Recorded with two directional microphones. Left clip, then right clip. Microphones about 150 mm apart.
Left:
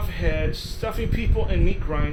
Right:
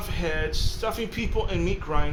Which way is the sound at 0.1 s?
20° right (ahead or behind).